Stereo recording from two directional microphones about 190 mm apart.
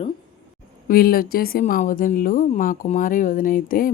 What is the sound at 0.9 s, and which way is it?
Speech, 50° left (ahead or behind).